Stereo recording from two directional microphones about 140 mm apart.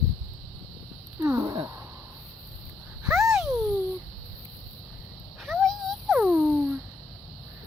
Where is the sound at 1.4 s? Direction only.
25° right (ahead or behind).